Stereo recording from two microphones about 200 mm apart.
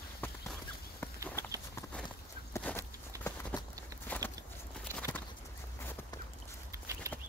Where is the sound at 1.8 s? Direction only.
5° left (ahead or behind).